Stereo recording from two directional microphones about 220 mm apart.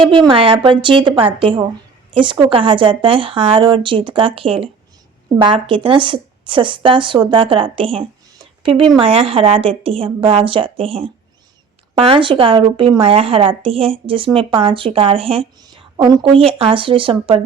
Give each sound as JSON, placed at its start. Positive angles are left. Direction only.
{"t": 0.3, "sound": "a woman's voice", "side_deg": -25}